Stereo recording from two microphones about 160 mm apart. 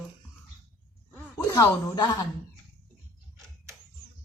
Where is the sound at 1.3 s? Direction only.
20° left (ahead or behind).